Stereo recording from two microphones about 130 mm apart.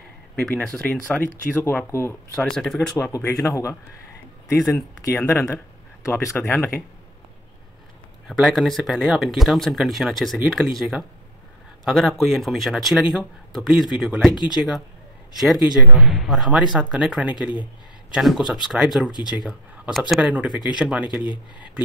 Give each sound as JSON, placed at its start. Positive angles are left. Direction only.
{"t": 0.4, "sound": "speech", "side_deg": 5}
{"t": 2.3, "sound": "speech", "side_deg": 5}
{"t": 3.4, "sound": "a man's voice", "side_deg": 20}
{"t": 4.6, "sound": "speech", "side_deg": 5}
{"t": 5.1, "sound": "speech", "side_deg": 15}
{"t": 8.3, "sound": "speech", "side_deg": 0}